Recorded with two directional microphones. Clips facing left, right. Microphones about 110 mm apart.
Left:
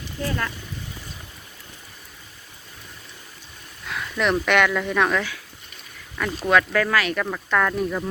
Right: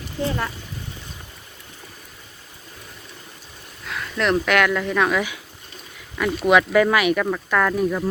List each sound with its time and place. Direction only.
0.2 s speech: 20° right (ahead or behind)
3.8 s speech: centre (ahead or behind)
6.4 s speech: 15° right (ahead or behind)
7.2 s speech: centre (ahead or behind)